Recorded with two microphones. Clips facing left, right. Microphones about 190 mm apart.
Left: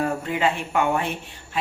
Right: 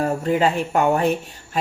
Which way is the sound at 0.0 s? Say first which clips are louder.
Right 4 dB; 40° right (ahead or behind).